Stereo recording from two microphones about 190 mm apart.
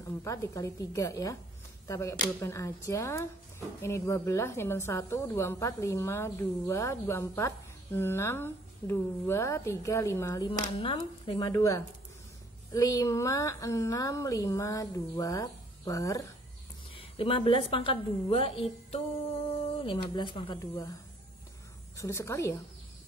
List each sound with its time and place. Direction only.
0.2 s a woman's voice: 15° left (ahead or behind)
10.8 s a woman's voice: 30° left (ahead or behind)
16.9 s a woman's voice: 30° left (ahead or behind)
21.9 s a woman's voice: 15° left (ahead or behind)